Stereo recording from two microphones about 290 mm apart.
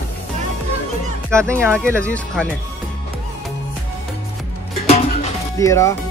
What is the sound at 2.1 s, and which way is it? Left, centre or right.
Speech, centre.